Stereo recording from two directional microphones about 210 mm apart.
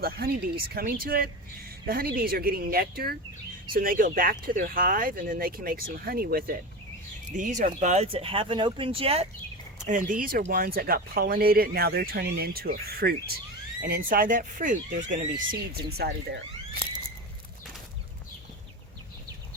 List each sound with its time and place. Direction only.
0.0 s speech: 45° right (ahead or behind); by 9.2 s 25° right (ahead or behind)
9.8 s speech: 40° right (ahead or behind)
16.0 s speech: 55° right (ahead or behind)